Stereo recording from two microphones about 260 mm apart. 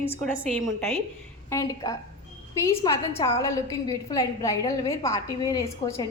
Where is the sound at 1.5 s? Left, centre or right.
Centre.